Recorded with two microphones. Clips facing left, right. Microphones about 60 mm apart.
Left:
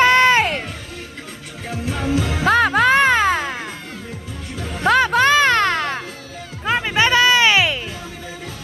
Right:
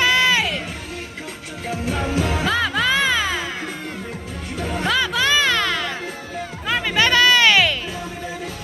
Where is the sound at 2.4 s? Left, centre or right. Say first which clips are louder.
Left 10 dB; left.